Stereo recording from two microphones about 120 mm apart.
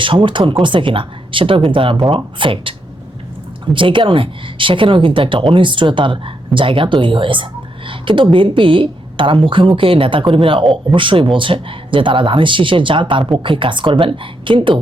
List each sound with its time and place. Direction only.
0.0 s a woman's voice: 45° right (ahead or behind)